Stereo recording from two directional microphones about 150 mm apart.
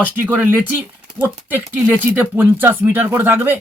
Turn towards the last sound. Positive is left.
turn(degrees=-15)  # may be behind; listen again after turning